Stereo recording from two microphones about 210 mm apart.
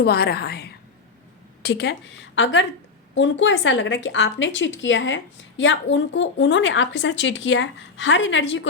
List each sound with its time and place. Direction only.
0.0 s a woman's voice: 50° left (ahead or behind)